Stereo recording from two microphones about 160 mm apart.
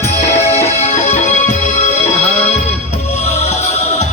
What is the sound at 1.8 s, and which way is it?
Music, 45° left (ahead or behind).